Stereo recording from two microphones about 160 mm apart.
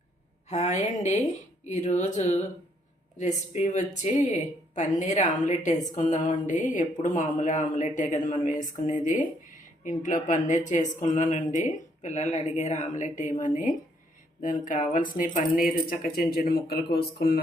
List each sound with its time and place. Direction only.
0.4 s speech: 45° left (ahead or behind); by 17.4 s 75° left (ahead or behind)